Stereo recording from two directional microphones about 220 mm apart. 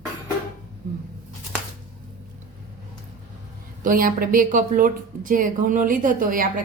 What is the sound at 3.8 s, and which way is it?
A woman's voice, 40° right (ahead or behind).